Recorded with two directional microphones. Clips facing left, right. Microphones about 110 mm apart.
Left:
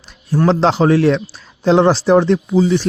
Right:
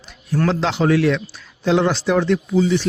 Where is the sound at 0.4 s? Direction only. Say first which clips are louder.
Left 6 dB; 35° left (ahead or behind).